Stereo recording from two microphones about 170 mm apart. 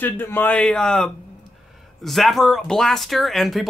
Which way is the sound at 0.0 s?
10° left (ahead or behind).